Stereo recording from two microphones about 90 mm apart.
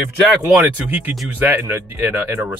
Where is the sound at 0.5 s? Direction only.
20° right (ahead or behind).